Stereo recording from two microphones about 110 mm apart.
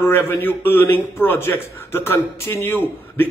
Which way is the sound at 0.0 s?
20° left (ahead or behind).